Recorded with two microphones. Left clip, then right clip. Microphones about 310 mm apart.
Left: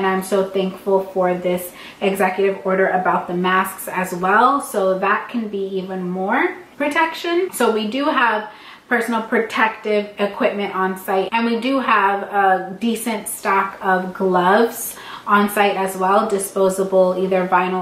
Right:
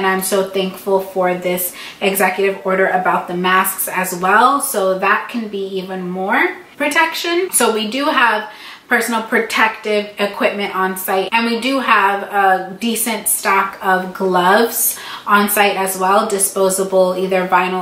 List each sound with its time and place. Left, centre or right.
0.8 s speech: left
1.2 s speech: centre
13.9 s speech: centre
14.3 s speech: centre
16.2 s speech: centre
17.2 s speech: centre